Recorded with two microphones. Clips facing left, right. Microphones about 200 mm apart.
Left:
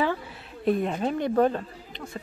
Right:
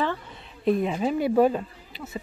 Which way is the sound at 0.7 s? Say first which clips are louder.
Right 1 dB; centre (ahead or behind).